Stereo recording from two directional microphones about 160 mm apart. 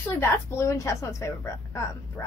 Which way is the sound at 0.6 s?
20° left (ahead or behind).